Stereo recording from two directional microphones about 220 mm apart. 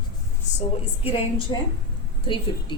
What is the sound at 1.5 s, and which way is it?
Speech, 20° left (ahead or behind).